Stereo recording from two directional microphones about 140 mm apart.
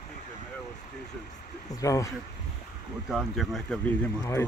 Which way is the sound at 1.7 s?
25° left (ahead or behind).